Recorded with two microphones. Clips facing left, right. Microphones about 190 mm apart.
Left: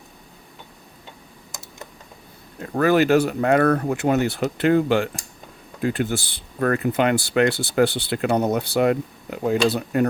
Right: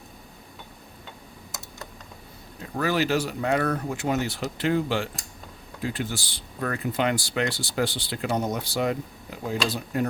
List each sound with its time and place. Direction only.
2.6 s speech: 55° left (ahead or behind)